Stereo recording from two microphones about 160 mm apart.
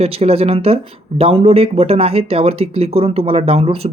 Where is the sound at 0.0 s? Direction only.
40° right (ahead or behind).